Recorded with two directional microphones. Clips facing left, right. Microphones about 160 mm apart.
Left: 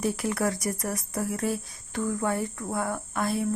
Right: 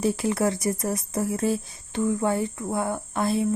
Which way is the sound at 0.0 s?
25° right (ahead or behind).